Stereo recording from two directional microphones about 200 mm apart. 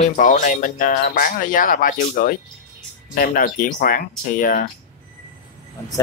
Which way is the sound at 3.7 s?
45° left (ahead or behind).